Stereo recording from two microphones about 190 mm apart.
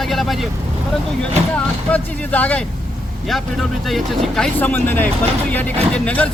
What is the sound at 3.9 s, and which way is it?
Speech, centre (ahead or behind).